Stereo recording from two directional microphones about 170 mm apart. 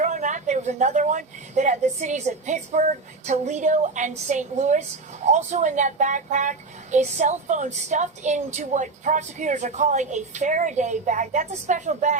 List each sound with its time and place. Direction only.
0.0 s a woman's voice: 45° right (ahead or behind)